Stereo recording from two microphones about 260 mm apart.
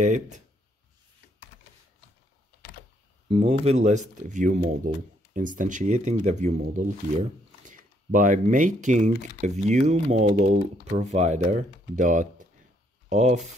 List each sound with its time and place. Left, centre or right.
0.0 s speech: right
3.3 s speech: right